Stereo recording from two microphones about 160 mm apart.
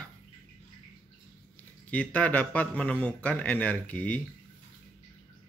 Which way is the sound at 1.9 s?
10° left (ahead or behind).